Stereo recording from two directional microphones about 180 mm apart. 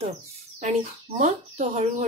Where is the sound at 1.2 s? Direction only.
45° right (ahead or behind).